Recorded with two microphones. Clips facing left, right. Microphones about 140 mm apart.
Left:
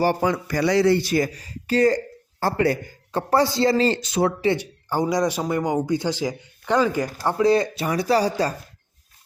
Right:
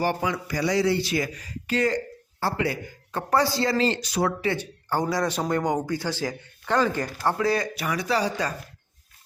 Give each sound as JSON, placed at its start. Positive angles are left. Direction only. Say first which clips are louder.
{"t": 0.0, "sound": "speech", "louder": "left 5 dB", "side_deg": 40}
{"t": 0.6, "sound": "speech", "louder": "left 5 dB", "side_deg": 65}
{"t": 3.1, "sound": "speech", "louder": "left 3 dB", "side_deg": 30}
{"t": 4.5, "sound": "a man's voice", "louder": "left 2 dB", "side_deg": 10}